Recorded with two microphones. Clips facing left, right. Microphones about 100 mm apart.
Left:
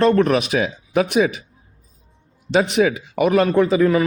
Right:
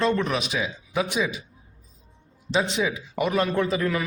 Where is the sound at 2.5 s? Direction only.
65° left (ahead or behind).